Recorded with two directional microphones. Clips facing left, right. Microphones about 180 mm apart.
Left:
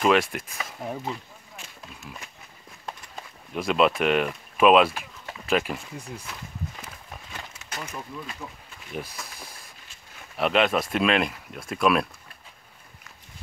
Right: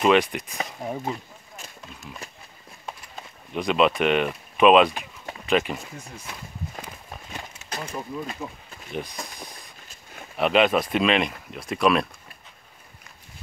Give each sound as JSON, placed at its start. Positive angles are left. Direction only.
{"t": 0.0, "sound": "speech", "side_deg": 0}
{"t": 2.2, "sound": "a sound", "side_deg": -35}
{"t": 3.5, "sound": "speech", "side_deg": 0}
{"t": 7.7, "sound": "speech", "side_deg": -30}
{"t": 8.4, "sound": "speech", "side_deg": -15}
{"t": 10.3, "sound": "speech", "side_deg": 0}